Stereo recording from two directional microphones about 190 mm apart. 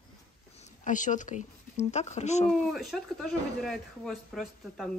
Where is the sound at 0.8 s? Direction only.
40° left (ahead or behind).